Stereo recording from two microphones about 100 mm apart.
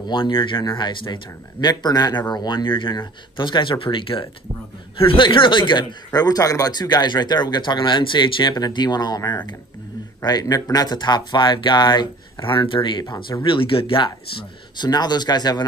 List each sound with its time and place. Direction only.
0.0 s speech: 55° left (ahead or behind)
14.8 s speech: 45° left (ahead or behind)